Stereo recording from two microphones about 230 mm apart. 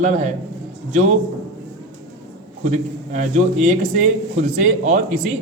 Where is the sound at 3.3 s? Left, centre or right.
Right.